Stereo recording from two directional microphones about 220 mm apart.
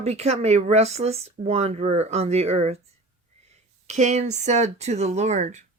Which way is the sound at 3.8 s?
30° right (ahead or behind).